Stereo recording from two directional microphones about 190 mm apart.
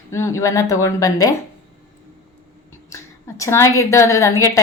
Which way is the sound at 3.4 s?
15° left (ahead or behind).